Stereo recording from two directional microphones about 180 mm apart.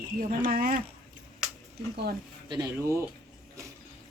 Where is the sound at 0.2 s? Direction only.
50° right (ahead or behind).